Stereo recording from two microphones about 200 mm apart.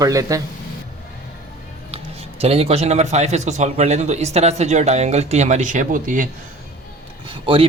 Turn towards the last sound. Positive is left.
turn(degrees=-25)  # may be behind; listen again after turning